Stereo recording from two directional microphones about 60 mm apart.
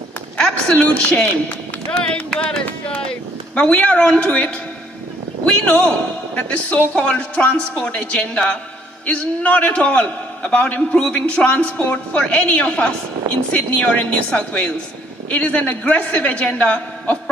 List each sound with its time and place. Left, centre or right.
0.4 s a man's voice: centre